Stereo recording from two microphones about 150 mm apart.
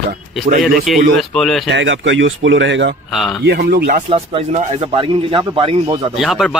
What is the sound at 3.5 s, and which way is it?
Speech, 90° right.